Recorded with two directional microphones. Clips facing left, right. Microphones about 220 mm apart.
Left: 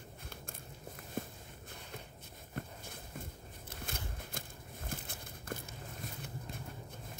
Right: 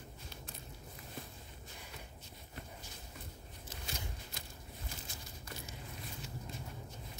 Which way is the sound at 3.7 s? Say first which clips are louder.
Left 2 dB; 55° left (ahead or behind).